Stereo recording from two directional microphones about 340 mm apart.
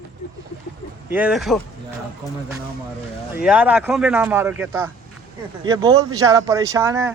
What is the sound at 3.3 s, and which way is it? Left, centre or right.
A man's voice, centre.